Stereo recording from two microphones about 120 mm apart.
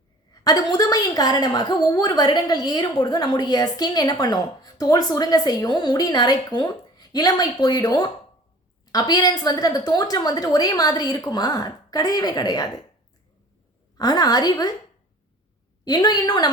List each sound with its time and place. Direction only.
0.4 s a woman's voice: 30° left (ahead or behind)
14.0 s a woman's voice: 35° left (ahead or behind)
15.8 s a woman's voice: 35° left (ahead or behind)